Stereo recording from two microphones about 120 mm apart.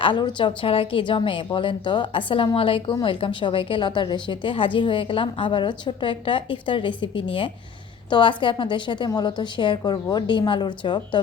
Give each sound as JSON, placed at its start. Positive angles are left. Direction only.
{"t": 0.0, "sound": "a woman's voice", "side_deg": 40}